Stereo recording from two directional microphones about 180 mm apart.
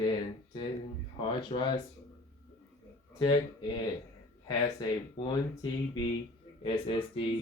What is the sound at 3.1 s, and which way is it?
Speech, 25° left (ahead or behind).